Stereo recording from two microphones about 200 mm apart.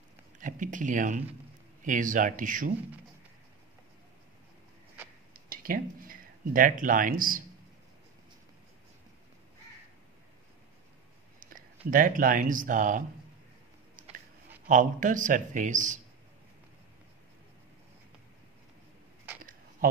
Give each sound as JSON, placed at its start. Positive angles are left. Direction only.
{"t": 0.4, "sound": "a man's voice", "side_deg": -40}
{"t": 5.3, "sound": "speech", "side_deg": -45}
{"t": 11.9, "sound": "a man's voice", "side_deg": -45}
{"t": 14.7, "sound": "a man's voice", "side_deg": -40}
{"t": 19.8, "sound": "a sound", "side_deg": -45}